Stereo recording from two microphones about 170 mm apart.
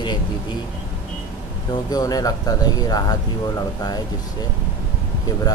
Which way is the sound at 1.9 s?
20° left (ahead or behind).